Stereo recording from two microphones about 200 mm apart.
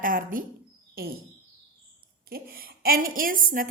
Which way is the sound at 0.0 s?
45° right (ahead or behind).